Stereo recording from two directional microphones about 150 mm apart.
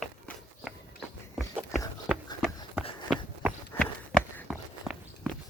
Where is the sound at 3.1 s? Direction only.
Centre (ahead or behind).